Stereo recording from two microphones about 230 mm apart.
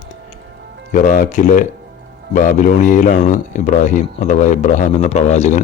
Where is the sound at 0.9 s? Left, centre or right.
Left.